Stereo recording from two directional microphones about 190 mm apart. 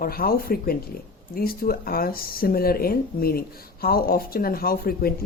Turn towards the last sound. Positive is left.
turn(degrees=50)  # may be behind; listen again after turning